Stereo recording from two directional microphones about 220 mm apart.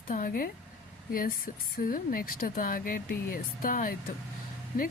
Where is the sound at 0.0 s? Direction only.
40° left (ahead or behind).